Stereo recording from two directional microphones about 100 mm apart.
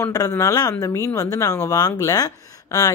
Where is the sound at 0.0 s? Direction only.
35° left (ahead or behind).